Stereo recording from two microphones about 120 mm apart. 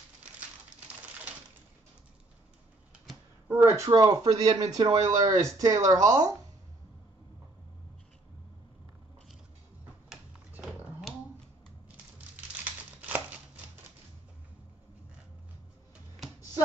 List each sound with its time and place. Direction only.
3.4 s speech: 20° right (ahead or behind)
10.0 s a sound: 5° right (ahead or behind)
13.0 s crumpling: 15° right (ahead or behind)